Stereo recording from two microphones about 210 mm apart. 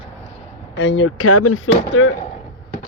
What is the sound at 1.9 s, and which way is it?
Speech, 65° left (ahead or behind).